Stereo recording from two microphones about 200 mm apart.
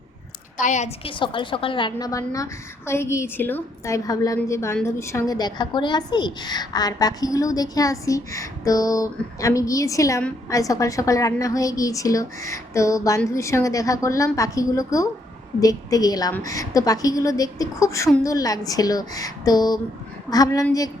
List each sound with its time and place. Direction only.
0.5 s a woman's voice: 40° left (ahead or behind); by 20.7 s 20° left (ahead or behind)